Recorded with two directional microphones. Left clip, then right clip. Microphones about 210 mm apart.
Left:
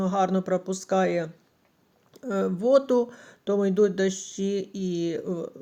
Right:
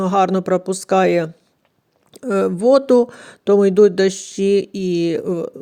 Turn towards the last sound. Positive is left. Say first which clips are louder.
# right 10 dB
turn(degrees=-40)  # may be behind; listen again after turning